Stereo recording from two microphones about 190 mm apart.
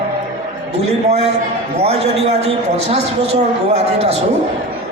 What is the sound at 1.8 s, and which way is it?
A man's voice, 30° right (ahead or behind).